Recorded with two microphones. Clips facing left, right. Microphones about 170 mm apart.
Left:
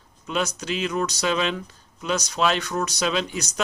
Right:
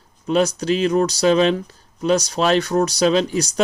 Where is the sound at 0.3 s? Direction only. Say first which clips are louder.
Right 9 dB; 40° right (ahead or behind).